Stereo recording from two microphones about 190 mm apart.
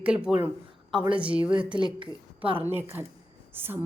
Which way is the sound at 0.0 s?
5° right (ahead or behind).